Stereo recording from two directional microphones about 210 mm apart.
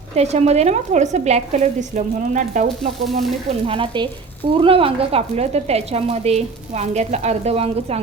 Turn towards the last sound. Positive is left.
turn(degrees=-30)  # may be behind; listen again after turning